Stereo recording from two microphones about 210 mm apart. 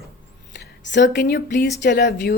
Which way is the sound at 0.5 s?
55° left (ahead or behind).